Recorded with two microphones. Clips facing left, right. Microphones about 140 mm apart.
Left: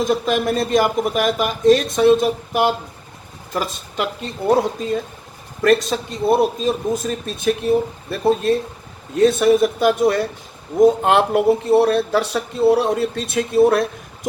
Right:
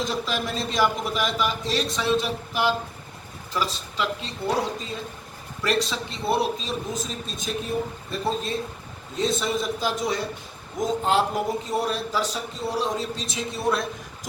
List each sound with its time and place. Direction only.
0.0 s a man's voice: 50° left (ahead or behind)